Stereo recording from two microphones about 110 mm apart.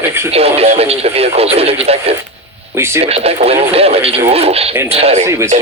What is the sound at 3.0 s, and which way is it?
Speech, 65° right (ahead or behind).